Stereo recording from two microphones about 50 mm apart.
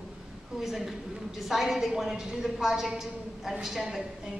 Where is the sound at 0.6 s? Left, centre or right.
Centre.